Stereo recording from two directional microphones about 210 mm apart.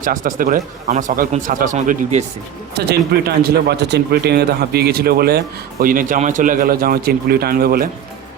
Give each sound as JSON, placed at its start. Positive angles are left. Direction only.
{"t": 0.0, "sound": "speech", "side_deg": -40}
{"t": 2.7, "sound": "speech", "side_deg": -50}